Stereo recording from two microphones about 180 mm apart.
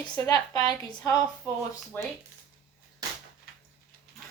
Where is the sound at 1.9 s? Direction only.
10° left (ahead or behind).